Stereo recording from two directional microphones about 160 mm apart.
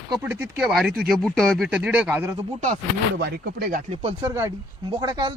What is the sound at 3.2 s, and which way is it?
Speech, 90° right.